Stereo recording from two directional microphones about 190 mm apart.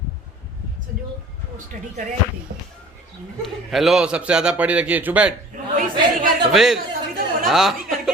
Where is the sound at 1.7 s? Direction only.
45° right (ahead or behind).